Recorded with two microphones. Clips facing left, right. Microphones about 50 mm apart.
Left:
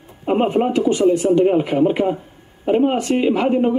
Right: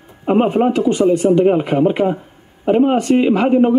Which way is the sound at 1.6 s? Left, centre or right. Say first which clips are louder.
Right 1 dB; centre.